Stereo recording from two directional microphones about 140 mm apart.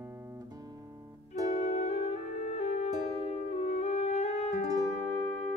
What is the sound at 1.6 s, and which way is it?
Music, 50° left (ahead or behind).